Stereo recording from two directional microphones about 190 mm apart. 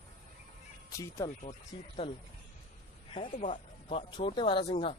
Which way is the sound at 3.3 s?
35° left (ahead or behind).